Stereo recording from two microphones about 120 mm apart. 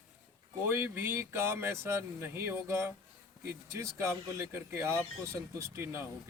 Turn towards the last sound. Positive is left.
turn(degrees=-20)  # may be behind; listen again after turning